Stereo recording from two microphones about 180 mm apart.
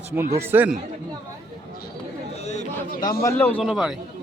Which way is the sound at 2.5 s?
40° left (ahead or behind).